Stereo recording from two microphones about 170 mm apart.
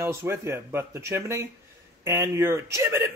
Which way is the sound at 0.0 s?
15° right (ahead or behind).